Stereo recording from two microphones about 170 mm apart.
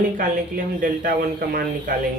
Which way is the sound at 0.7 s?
55° right (ahead or behind).